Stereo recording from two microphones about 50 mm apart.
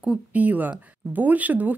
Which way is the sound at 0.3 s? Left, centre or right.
Right.